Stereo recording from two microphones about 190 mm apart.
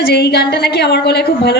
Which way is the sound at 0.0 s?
60° left (ahead or behind).